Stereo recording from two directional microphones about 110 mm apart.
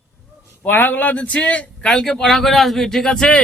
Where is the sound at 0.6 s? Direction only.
15° left (ahead or behind).